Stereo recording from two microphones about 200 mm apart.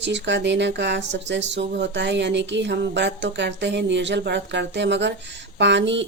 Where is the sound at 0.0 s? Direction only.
60° right (ahead or behind).